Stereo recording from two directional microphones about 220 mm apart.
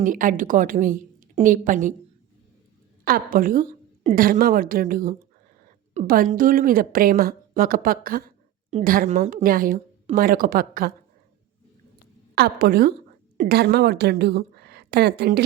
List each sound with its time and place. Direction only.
0.0 s a woman's voice: 35° right (ahead or behind)
3.0 s a woman's voice: 40° right (ahead or behind)
12.3 s a woman's voice: 45° right (ahead or behind)